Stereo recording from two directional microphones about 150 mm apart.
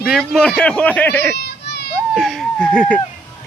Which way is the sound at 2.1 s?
Centre (ahead or behind).